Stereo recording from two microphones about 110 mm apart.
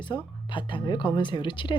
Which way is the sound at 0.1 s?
40° left (ahead or behind).